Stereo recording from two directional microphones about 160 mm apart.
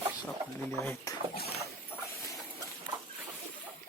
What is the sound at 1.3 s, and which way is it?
Rowboat, 75° left (ahead or behind).